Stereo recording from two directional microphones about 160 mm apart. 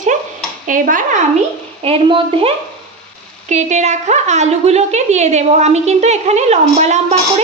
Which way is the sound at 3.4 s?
45° right (ahead or behind).